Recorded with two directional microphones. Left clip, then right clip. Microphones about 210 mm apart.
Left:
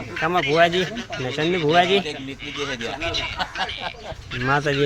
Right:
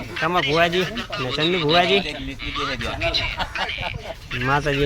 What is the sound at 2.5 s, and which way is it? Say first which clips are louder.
Speech: right 2 dB; 25° right (ahead or behind).